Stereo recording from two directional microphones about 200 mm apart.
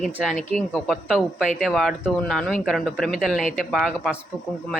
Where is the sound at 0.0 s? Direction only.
Centre (ahead or behind).